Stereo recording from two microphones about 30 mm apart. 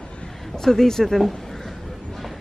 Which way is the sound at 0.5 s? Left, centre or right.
Centre.